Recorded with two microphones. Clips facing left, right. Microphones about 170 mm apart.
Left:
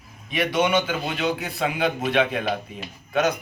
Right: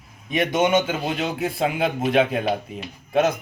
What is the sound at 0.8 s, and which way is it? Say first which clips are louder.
Speech: even; 25° right (ahead or behind).